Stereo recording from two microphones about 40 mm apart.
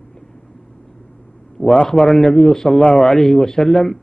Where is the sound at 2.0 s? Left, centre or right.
Centre.